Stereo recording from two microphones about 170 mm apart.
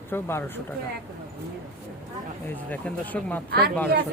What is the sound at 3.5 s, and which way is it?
Speech, 65° right (ahead or behind).